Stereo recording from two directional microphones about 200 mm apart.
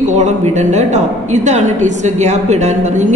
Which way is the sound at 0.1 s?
35° right (ahead or behind).